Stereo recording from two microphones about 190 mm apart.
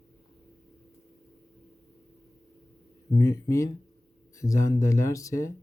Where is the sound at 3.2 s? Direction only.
15° left (ahead or behind).